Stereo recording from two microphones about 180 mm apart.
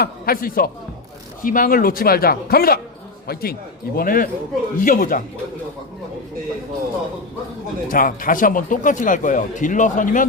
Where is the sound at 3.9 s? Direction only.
50° left (ahead or behind).